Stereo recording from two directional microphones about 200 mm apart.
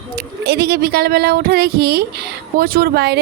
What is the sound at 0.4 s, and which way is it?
Speech, 55° right (ahead or behind).